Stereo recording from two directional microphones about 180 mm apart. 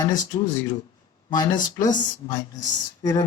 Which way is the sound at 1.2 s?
25° left (ahead or behind).